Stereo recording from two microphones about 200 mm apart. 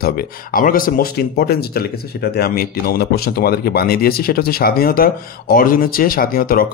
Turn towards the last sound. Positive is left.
turn(degrees=45)  # may be behind; listen again after turning